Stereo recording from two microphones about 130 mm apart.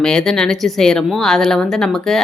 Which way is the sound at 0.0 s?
5° left (ahead or behind).